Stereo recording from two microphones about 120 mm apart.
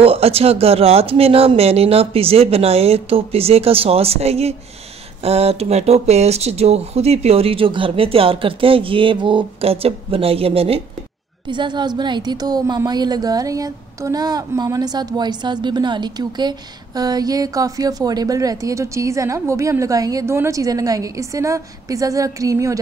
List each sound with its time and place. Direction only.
0.0 s speech: 55° right (ahead or behind)
11.4 s a woman's voice: 40° right (ahead or behind)